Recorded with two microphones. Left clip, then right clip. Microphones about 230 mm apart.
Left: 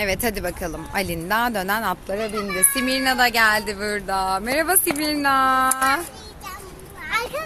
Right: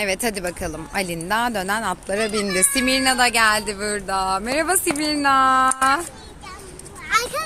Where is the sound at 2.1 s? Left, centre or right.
Centre.